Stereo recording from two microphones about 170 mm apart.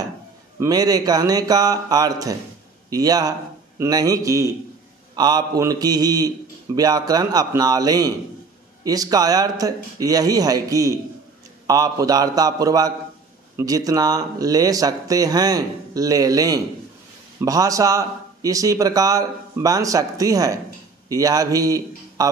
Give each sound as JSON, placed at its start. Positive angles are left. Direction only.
{"t": 0.6, "sound": "a man's voice", "side_deg": -20}